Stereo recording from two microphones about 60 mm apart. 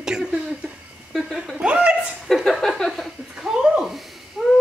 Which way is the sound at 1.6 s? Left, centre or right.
Centre.